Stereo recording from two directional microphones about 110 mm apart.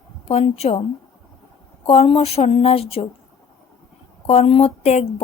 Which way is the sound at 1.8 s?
60° left (ahead or behind).